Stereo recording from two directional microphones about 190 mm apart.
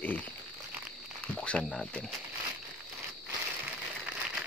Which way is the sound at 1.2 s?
5° left (ahead or behind).